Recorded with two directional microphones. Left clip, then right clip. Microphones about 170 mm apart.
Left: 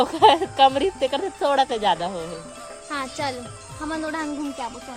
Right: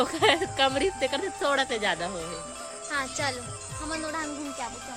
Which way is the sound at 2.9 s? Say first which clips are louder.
Left 2 dB; 30° left (ahead or behind).